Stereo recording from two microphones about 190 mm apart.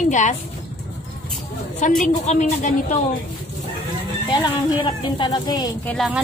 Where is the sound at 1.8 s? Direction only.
40° left (ahead or behind).